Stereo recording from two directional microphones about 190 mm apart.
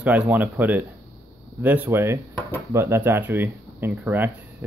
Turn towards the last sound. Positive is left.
turn(degrees=-10)  # may be behind; listen again after turning